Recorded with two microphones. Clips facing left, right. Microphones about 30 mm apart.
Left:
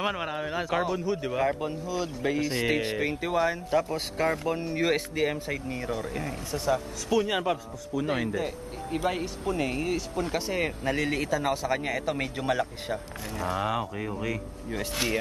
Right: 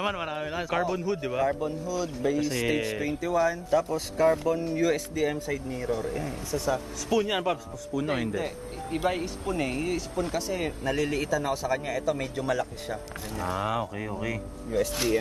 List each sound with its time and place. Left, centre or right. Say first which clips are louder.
0.0 s speech: even; centre
1.6 s speech: right 1 dB; left
4.7 s speech: even; left
5.9 s speech: right 5 dB; centre
6.7 s speech: left 2 dB; centre
10.3 s speech: left 1 dB; left
10.9 s a man's voice: right 2 dB; left
11.7 s speech: right 1 dB; left
13.4 s speech: even; centre
14.7 s speech: right 3 dB; left